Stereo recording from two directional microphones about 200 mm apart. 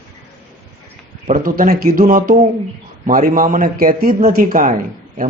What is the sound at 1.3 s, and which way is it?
A man's voice, 45° right (ahead or behind).